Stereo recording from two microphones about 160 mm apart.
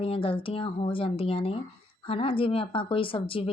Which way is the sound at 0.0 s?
35° left (ahead or behind).